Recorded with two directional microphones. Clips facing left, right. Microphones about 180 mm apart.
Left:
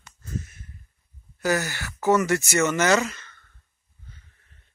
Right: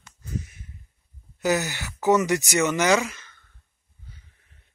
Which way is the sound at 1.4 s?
20° right (ahead or behind).